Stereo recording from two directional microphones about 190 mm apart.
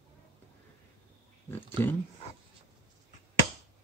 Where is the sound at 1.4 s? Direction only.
10° left (ahead or behind).